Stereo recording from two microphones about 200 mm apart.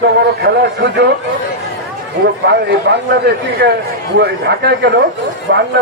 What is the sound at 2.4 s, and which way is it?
A man's voice, 55° right (ahead or behind).